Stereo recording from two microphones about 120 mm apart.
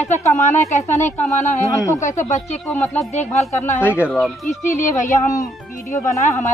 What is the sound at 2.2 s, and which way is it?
Speech, 65° left (ahead or behind).